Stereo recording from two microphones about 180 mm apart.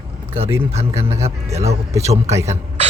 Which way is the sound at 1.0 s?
35° right (ahead or behind).